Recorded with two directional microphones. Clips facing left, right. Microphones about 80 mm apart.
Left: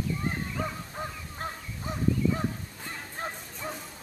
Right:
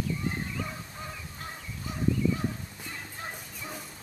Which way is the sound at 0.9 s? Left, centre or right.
Left.